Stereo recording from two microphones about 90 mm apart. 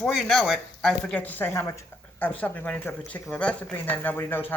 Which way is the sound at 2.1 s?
15° left (ahead or behind).